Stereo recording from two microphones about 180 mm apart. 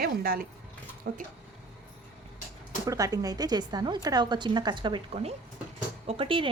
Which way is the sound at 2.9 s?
20° right (ahead or behind).